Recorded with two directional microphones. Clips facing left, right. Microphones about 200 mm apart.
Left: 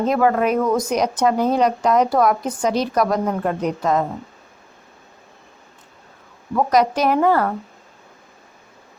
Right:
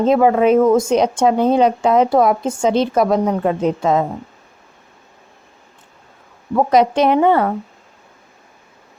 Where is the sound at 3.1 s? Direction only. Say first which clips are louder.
Right 4 dB; 10° right (ahead or behind).